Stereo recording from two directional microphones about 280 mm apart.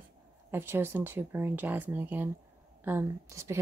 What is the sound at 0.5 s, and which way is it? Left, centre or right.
Speech, centre.